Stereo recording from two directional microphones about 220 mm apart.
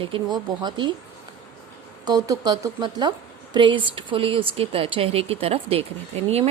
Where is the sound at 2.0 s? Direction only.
15° right (ahead or behind).